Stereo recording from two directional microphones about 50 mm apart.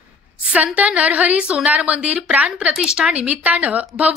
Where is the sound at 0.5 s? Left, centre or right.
Right; by 3.1 s centre.